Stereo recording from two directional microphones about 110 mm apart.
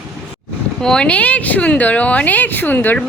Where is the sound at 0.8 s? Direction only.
5° left (ahead or behind).